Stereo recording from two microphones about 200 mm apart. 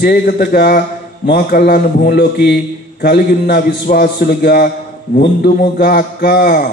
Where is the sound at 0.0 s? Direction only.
50° left (ahead or behind).